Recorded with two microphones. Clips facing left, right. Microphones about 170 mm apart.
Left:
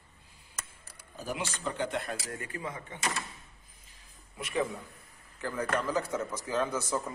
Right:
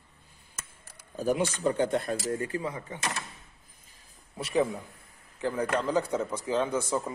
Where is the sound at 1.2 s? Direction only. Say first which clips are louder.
Right 9 dB; 45° right (ahead or behind).